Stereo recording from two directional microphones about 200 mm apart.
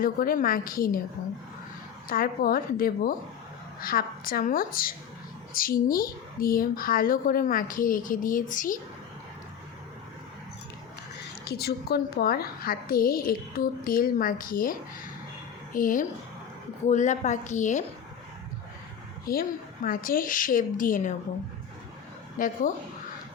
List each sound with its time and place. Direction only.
0.0 s a woman's voice: 45° left (ahead or behind)
2.0 s a woman's voice: 45° left (ahead or behind)
11.4 s a woman's voice: 50° left (ahead or behind)
19.3 s a woman's voice: 45° left (ahead or behind)
22.4 s a woman's voice: 40° left (ahead or behind)